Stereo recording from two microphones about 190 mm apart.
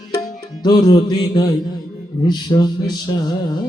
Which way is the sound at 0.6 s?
20° left (ahead or behind).